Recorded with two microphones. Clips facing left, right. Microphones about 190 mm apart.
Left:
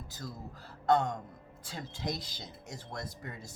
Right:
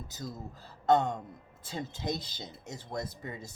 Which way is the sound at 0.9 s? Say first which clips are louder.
Right 2 dB; 20° right (ahead or behind).